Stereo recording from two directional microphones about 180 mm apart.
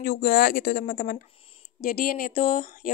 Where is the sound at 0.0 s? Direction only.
55° left (ahead or behind).